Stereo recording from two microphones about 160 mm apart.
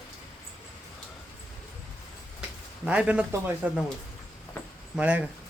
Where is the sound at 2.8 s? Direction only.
10° right (ahead or behind).